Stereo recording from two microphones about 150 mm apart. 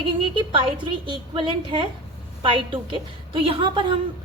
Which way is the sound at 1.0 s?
30° right (ahead or behind).